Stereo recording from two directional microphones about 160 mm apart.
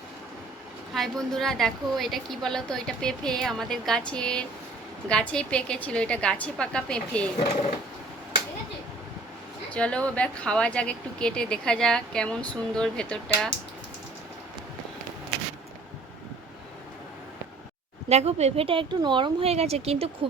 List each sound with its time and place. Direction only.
0.9 s a woman's voice: centre (ahead or behind)
9.7 s speech: 5° left (ahead or behind)
18.1 s speech: 40° right (ahead or behind)